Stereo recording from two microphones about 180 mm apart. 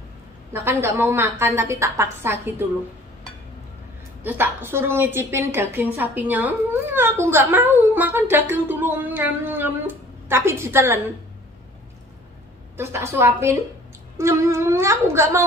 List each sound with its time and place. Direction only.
0.5 s a woman's voice: 15° right (ahead or behind)
4.2 s a woman's voice: 10° right (ahead or behind)
12.7 s a woman's voice: 15° right (ahead or behind)